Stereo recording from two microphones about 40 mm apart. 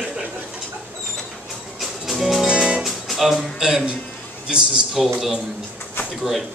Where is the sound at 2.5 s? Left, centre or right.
Right.